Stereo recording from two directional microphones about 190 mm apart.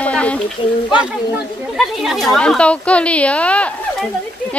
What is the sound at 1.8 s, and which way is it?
Speech, centre (ahead or behind).